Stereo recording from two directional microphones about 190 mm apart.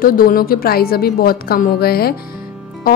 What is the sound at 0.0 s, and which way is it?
Speech, 50° left (ahead or behind).